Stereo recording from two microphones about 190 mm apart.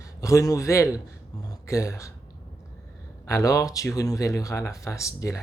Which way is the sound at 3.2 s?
15° left (ahead or behind).